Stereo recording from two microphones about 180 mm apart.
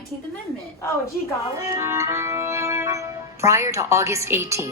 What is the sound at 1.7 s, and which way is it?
Speech, 15° right (ahead or behind).